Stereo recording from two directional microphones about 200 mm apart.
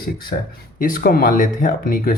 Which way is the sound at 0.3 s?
45° left (ahead or behind).